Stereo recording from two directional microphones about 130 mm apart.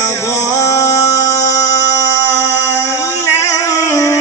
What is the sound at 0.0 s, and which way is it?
Music, 20° left (ahead or behind).